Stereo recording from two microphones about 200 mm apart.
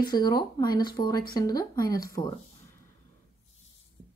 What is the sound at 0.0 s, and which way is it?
Speech, 20° left (ahead or behind).